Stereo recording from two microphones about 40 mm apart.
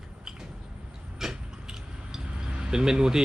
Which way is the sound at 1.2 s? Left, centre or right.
Centre.